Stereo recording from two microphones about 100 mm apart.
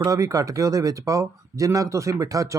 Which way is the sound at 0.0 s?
35° right (ahead or behind).